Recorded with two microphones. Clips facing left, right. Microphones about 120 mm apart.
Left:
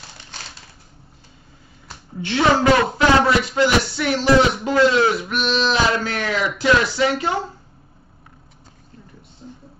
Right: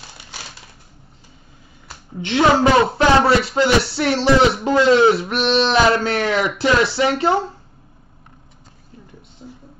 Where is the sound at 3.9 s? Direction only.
30° right (ahead or behind).